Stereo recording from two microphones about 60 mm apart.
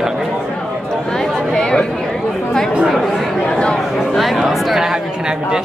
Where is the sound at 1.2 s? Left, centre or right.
Centre.